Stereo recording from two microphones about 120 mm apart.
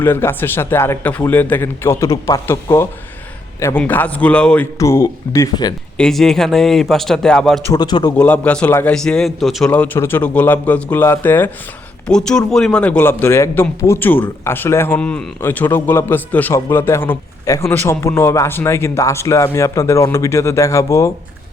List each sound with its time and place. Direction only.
0.0 s a man's voice: 20° left (ahead or behind)
4.8 s a man's voice: 25° left (ahead or behind)
6.0 s speech: 5° left (ahead or behind)
7.7 s a man's voice: 35° left (ahead or behind)
8.1 s a man's voice: 10° left (ahead or behind)
9.7 s a man's voice: 15° left (ahead or behind)
12.0 s a man's voice: 5° left (ahead or behind); by 21.1 s 25° left (ahead or behind)